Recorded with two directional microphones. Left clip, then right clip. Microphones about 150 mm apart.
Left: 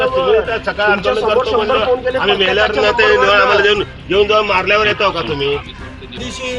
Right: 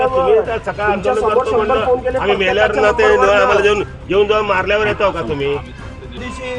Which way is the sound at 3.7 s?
20° right (ahead or behind).